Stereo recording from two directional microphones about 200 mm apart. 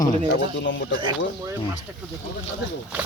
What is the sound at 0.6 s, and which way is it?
Speech, 65° left (ahead or behind).